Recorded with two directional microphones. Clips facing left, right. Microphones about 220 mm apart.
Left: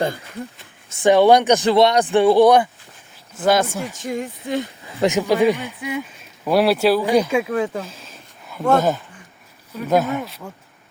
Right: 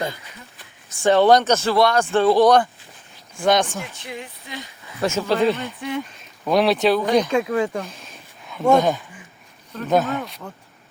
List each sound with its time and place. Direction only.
0.9 s speech: 15° left (ahead or behind)
4.0 s speech: 45° left (ahead or behind)
4.9 s speech: 15° left (ahead or behind)